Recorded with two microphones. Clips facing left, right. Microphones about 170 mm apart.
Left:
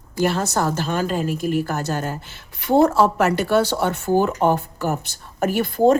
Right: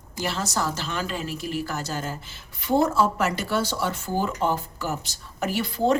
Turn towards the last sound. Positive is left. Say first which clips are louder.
# left 6 dB
turn(degrees=45)  # may be behind; listen again after turning